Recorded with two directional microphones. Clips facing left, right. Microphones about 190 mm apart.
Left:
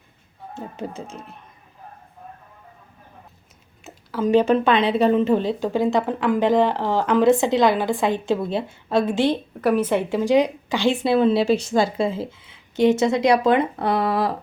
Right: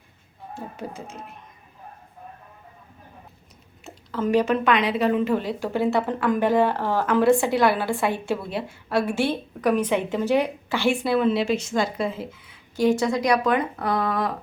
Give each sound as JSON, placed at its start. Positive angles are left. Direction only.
{"t": 0.5, "sound": "a woman's voice", "side_deg": 25}
{"t": 3.8, "sound": "a sound", "side_deg": 10}
{"t": 4.3, "sound": "a woman's voice", "side_deg": 25}
{"t": 9.6, "sound": "a woman's voice", "side_deg": 5}